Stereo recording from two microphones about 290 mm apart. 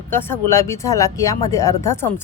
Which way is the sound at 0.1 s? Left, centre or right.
Centre.